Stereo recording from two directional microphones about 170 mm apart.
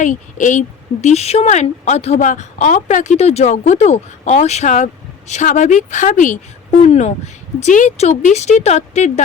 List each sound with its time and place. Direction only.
0.0 s a woman's voice: 50° left (ahead or behind)